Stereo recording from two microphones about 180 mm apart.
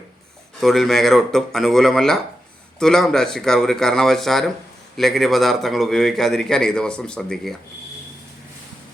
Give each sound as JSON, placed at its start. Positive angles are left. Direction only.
{"t": 0.6, "sound": "a man's voice", "side_deg": 0}